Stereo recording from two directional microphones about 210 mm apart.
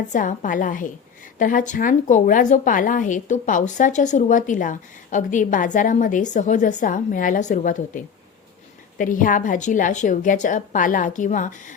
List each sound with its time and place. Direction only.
0.1 s a woman's voice: 40° left (ahead or behind)